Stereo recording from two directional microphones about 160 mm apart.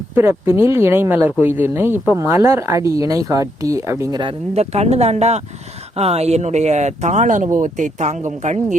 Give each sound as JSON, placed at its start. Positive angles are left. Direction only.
{"t": 0.1, "sound": "speech", "side_deg": -15}